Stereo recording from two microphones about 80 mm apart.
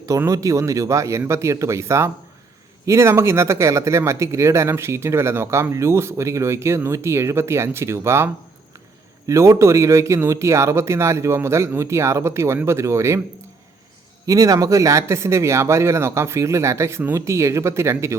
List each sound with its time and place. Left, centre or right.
0.3 s speech: right
14.3 s speech: right